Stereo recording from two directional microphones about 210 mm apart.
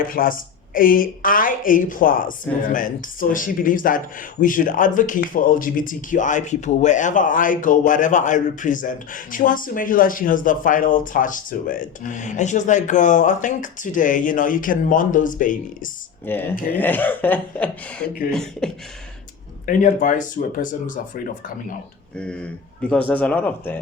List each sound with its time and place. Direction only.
0.0 s speech: 40° left (ahead or behind)
16.2 s speech: 10° left (ahead or behind)
18.3 s beatboxing: 5° left (ahead or behind)
19.6 s speech: 40° left (ahead or behind)
22.2 s speech: 5° left (ahead or behind)